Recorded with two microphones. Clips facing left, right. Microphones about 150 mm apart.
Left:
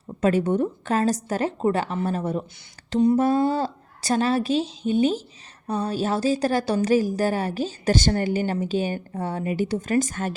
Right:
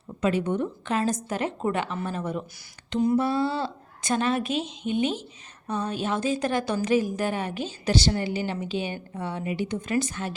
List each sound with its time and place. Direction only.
0.2 s a woman's voice: 40° left (ahead or behind)